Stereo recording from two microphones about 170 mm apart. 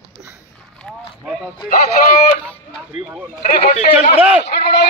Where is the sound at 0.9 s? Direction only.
Centre (ahead or behind).